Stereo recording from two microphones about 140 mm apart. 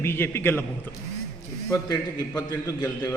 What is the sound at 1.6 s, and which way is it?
A man's voice, 25° left (ahead or behind).